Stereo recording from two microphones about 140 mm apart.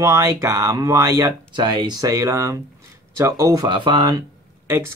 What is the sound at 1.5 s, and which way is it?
Speech, 35° right (ahead or behind).